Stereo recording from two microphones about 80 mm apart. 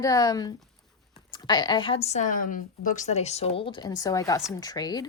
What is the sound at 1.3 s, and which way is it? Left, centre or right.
Speech, left.